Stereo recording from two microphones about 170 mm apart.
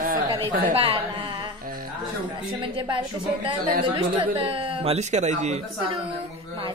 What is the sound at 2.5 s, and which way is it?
A woman's voice, 30° right (ahead or behind).